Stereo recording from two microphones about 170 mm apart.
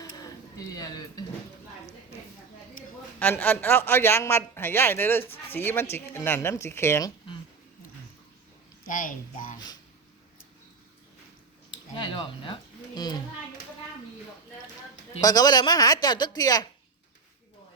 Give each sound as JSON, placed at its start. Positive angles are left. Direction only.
{"t": 0.0, "sound": "a sound", "side_deg": 20}
{"t": 3.2, "sound": "speech", "side_deg": 10}
{"t": 8.9, "sound": "a child's voice", "side_deg": 50}
{"t": 11.7, "sound": "speech", "side_deg": 30}
{"t": 15.2, "sound": "speech", "side_deg": 20}